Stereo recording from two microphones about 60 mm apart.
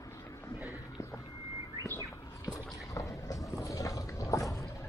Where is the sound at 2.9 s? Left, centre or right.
Left.